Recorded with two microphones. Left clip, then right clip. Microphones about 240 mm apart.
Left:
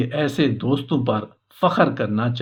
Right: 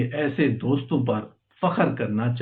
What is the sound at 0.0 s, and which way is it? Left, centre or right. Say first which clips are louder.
Speech: left 3 dB; left.